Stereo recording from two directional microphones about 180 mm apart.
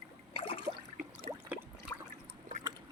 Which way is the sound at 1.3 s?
35° right (ahead or behind).